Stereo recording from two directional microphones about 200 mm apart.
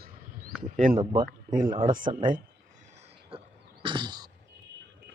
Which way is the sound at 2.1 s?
25° right (ahead or behind).